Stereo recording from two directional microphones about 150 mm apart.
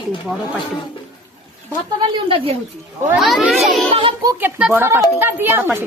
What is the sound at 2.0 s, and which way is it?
Speech, 35° right (ahead or behind).